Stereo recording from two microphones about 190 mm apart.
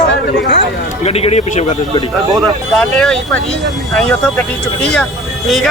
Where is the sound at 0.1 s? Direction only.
60° left (ahead or behind).